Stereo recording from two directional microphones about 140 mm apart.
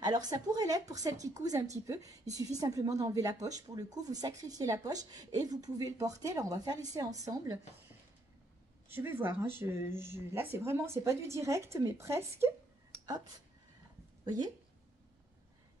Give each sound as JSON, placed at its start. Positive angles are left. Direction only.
{"t": 0.0, "sound": "speech", "side_deg": -30}
{"t": 8.8, "sound": "speech", "side_deg": -15}